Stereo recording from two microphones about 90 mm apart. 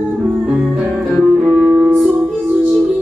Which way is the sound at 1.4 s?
15° right (ahead or behind).